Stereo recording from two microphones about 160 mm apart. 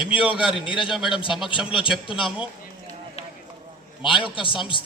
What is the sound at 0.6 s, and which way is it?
Speech, 30° left (ahead or behind).